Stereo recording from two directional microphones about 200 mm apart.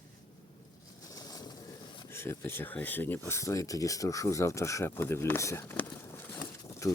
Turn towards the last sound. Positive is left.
turn(degrees=10)  # may be behind; listen again after turning